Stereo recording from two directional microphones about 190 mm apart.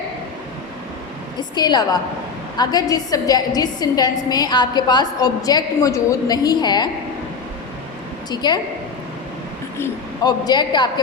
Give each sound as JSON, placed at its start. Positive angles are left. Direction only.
{"t": 1.4, "sound": "a woman's voice", "side_deg": 20}
{"t": 8.3, "sound": "a woman's voice", "side_deg": 20}
{"t": 9.7, "sound": "a woman's voice", "side_deg": 15}